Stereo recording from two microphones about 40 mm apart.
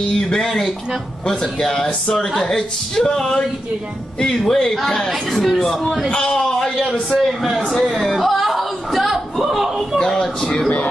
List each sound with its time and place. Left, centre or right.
0.0 s a man's voice: centre
6.0 s a man's voice: left
7.2 s a man's voice: centre
9.9 s a man's voice: centre